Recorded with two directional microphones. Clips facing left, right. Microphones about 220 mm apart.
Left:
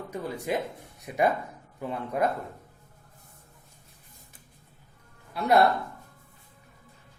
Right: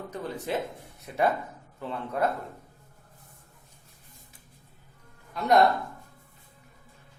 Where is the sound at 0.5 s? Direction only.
10° left (ahead or behind).